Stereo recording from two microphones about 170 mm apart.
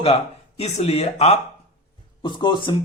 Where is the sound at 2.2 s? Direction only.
25° left (ahead or behind).